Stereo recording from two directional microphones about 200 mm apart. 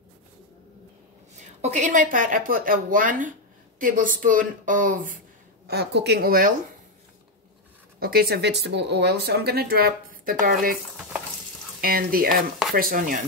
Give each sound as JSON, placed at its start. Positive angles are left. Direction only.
{"t": 1.6, "sound": "speech", "side_deg": -35}
{"t": 5.7, "sound": "speech", "side_deg": -55}
{"t": 8.0, "sound": "speech", "side_deg": -50}
{"t": 11.8, "sound": "speech", "side_deg": -45}